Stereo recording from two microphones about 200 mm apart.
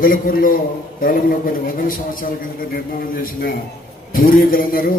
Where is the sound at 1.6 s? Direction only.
45° left (ahead or behind).